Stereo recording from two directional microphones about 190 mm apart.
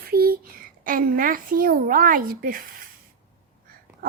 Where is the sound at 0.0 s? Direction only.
50° right (ahead or behind).